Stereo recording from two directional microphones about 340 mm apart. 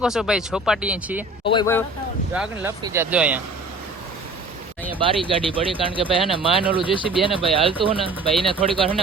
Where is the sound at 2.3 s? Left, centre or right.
Centre.